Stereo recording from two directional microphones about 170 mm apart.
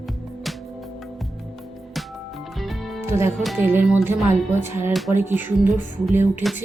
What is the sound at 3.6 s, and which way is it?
Music, 10° right (ahead or behind).